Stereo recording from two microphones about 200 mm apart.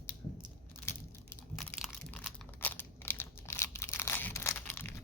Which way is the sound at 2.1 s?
5° left (ahead or behind).